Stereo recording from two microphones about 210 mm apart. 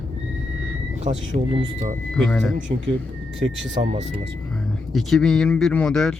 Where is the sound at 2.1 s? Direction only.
5° left (ahead or behind).